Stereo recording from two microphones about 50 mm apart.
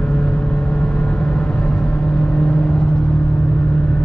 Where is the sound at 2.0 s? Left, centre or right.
Centre.